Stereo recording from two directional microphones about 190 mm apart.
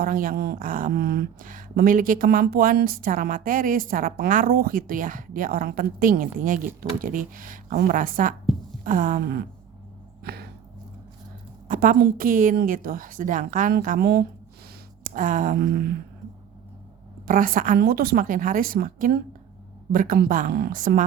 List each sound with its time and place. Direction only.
0.0 s speech: 45° right (ahead or behind)
10.2 s a sound: 55° right (ahead or behind)
11.7 s speech: 45° right (ahead or behind)
17.2 s speech: 50° right (ahead or behind)